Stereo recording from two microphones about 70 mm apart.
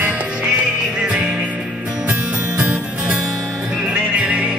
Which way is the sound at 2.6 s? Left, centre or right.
Centre.